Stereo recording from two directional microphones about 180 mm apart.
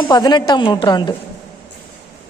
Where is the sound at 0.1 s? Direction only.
20° left (ahead or behind).